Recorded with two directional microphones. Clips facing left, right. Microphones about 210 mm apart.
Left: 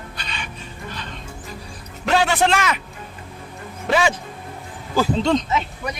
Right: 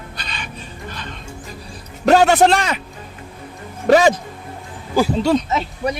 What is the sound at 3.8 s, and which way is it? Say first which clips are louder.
Speech: right 7 dB; 40° right (ahead or behind).